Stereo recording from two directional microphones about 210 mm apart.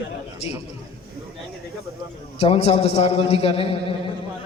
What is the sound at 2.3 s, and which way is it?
A man's voice, 25° left (ahead or behind).